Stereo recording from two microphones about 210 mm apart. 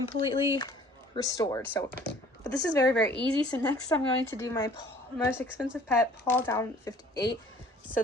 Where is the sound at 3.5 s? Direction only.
15° left (ahead or behind).